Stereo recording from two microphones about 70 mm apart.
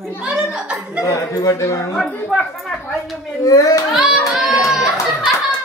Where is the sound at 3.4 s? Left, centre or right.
Left.